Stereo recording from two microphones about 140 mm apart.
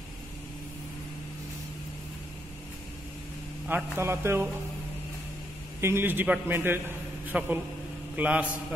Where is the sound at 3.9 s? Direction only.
20° right (ahead or behind).